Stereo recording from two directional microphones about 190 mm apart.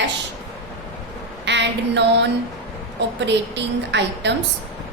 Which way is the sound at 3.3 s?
65° right (ahead or behind).